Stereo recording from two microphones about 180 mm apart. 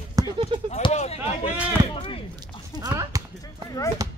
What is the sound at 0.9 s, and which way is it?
Speech, 35° left (ahead or behind).